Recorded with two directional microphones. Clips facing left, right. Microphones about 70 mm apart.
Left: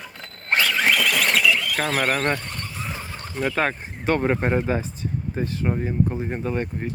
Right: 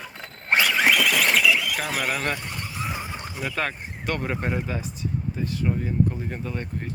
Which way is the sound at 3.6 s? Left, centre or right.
Left.